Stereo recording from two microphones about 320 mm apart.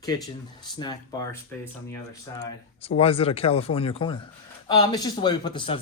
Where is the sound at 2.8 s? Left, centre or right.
Centre.